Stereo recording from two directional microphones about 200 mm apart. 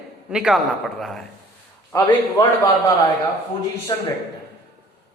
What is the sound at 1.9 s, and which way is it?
Speech, 15° left (ahead or behind).